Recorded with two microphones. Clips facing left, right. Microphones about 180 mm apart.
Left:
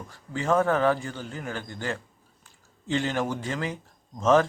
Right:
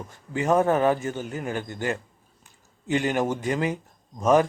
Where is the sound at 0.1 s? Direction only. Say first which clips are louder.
Right 2 dB; 20° right (ahead or behind).